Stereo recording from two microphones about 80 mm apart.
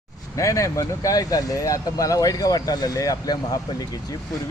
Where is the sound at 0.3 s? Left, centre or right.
Left.